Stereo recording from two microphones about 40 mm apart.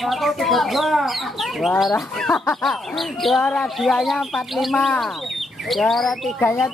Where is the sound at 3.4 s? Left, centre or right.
Centre.